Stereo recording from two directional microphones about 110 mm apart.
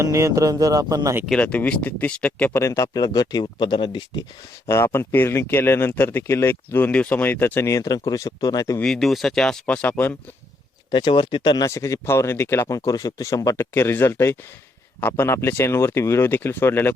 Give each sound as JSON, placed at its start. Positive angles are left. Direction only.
{"t": 0.0, "sound": "speech", "side_deg": -25}
{"t": 1.3, "sound": "speech", "side_deg": 10}
{"t": 2.6, "sound": "speech", "side_deg": 25}
{"t": 4.6, "sound": "speech", "side_deg": 25}
{"t": 8.8, "sound": "speech", "side_deg": 5}
{"t": 10.9, "sound": "speech", "side_deg": 45}